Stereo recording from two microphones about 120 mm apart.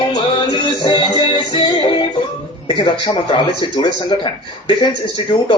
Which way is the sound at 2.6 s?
40° left (ahead or behind).